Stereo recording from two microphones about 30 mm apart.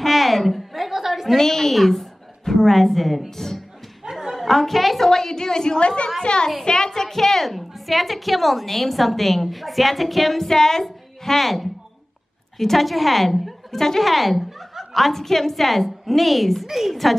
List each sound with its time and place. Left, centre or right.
0.0 s a sound: centre
1.3 s a woman's voice: centre
4.0 s a sound: centre
4.5 s a woman's voice: centre
5.1 s a woman's voice: centre
5.8 s a woman's voice: left; by 14.0 s centre
14.0 s chuckle: centre
15.1 s a woman's voice: centre